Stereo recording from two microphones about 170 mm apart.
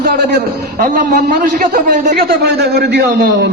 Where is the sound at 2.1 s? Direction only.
70° right (ahead or behind).